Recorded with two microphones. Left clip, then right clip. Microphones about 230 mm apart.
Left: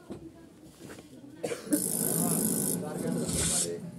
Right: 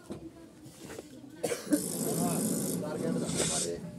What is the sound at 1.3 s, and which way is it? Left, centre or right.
Cough, right.